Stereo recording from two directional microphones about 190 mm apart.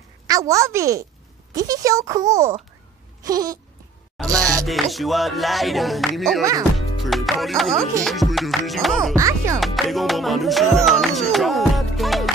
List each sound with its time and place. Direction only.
0.3 s a child's voice: 15° right (ahead or behind)
3.3 s a sound: 20° right (ahead or behind)
4.3 s a child's voice: 15° right (ahead or behind)
4.6 s music: centre (ahead or behind)
7.0 s speech: centre (ahead or behind)
8.0 s music: centre (ahead or behind)
9.1 s a child's voice: 15° right (ahead or behind)
9.6 s music: centre (ahead or behind)